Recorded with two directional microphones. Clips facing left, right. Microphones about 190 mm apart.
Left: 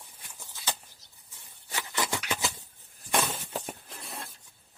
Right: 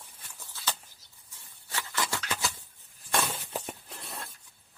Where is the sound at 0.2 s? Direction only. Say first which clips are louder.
Even; 15° left (ahead or behind).